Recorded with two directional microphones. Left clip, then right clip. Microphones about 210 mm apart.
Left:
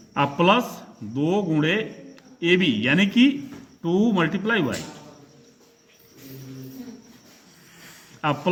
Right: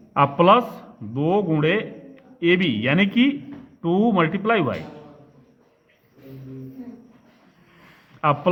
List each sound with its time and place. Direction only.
0.1 s a man's voice: 40° right (ahead or behind)